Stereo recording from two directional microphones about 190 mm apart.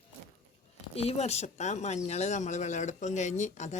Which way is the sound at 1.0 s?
35° left (ahead or behind).